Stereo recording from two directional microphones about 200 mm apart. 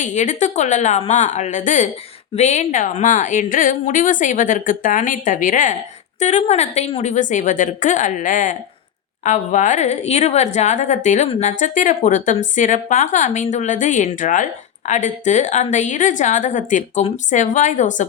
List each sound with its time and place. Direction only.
0.0 s a woman's voice: 35° left (ahead or behind)